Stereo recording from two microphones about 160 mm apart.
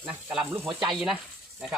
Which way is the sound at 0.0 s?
10° right (ahead or behind).